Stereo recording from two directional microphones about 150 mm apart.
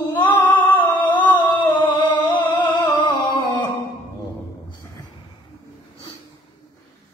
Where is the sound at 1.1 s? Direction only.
30° left (ahead or behind).